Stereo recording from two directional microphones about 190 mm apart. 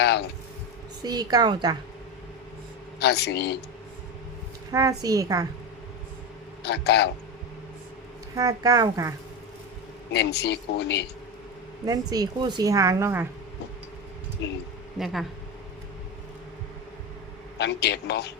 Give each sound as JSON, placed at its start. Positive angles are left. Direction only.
{"t": 1.0, "sound": "a woman's voice", "side_deg": -20}
{"t": 3.0, "sound": "speech", "side_deg": 60}
{"t": 4.7, "sound": "a woman's voice", "side_deg": -20}
{"t": 6.6, "sound": "speech", "side_deg": 60}
{"t": 8.4, "sound": "a woman's voice", "side_deg": -20}
{"t": 10.1, "sound": "speech", "side_deg": 60}
{"t": 11.9, "sound": "a woman's voice", "side_deg": -20}
{"t": 14.4, "sound": "speech", "side_deg": 70}
{"t": 14.9, "sound": "speech", "side_deg": 0}
{"t": 17.6, "sound": "speech", "side_deg": 60}